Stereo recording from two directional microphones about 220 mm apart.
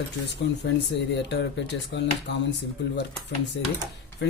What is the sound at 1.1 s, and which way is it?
Speech, 55° left (ahead or behind).